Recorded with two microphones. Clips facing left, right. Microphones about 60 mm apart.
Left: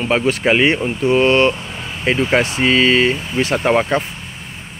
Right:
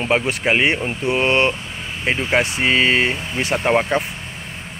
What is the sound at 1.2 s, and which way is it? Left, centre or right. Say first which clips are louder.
Speech: left 3 dB; right.